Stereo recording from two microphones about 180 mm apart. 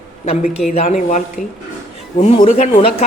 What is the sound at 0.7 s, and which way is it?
Speech, 40° left (ahead or behind).